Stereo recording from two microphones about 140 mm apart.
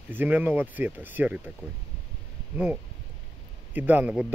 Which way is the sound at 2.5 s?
10° right (ahead or behind).